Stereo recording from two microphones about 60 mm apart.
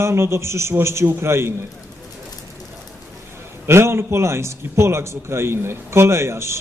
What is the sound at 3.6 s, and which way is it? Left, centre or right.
A man's voice, right.